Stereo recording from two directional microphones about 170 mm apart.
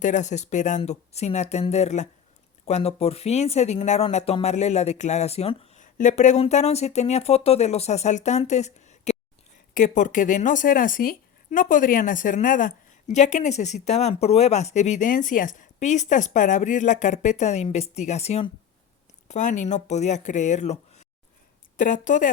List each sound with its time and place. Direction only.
0.0 s speech: 45° left (ahead or behind)